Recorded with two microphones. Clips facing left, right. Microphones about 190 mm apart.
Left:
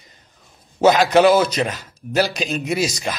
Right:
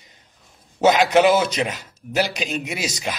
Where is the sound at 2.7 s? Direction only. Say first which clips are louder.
Left 6 dB; 40° left (ahead or behind).